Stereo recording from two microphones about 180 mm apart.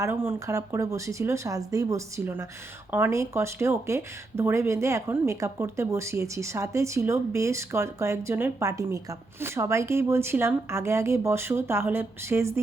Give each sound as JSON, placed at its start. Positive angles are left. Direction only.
{"t": 0.0, "sound": "speech", "side_deg": -15}